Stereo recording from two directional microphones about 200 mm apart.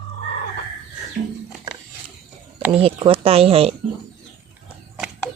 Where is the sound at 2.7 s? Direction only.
30° right (ahead or behind).